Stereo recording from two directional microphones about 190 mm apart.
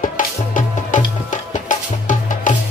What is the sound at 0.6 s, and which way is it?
Music, 40° left (ahead or behind).